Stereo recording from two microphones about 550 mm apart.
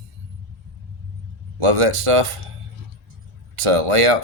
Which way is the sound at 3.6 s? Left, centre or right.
Right.